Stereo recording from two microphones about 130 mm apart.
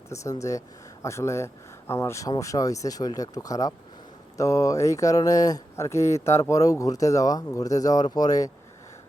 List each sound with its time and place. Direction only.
0.1 s speech: 25° left (ahead or behind)